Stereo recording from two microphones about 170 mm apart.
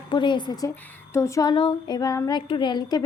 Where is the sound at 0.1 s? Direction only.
25° left (ahead or behind).